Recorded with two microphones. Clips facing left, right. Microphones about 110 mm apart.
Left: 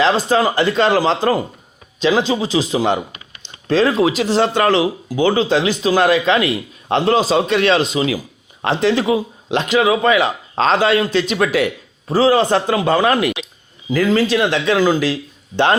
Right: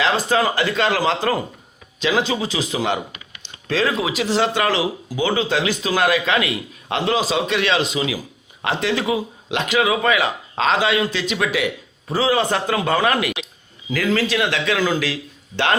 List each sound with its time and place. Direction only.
0.0 s a man's voice: 30° left (ahead or behind)